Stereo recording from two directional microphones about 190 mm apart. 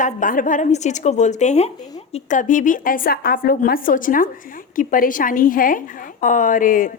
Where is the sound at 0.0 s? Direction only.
45° left (ahead or behind).